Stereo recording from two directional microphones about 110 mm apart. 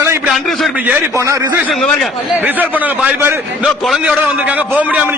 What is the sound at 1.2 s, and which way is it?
Speech, 30° right (ahead or behind).